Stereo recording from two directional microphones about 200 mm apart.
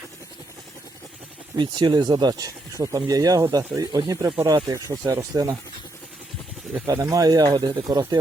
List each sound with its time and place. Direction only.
1.5 s speech: 25° right (ahead or behind)
6.8 s speech: 15° right (ahead or behind)